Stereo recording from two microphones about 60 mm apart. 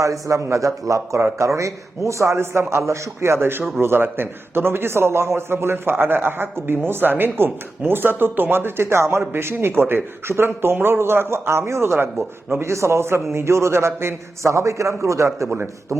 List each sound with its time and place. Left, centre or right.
0.0 s speech: right
3.8 s a man's voice: right
15.5 s speech: right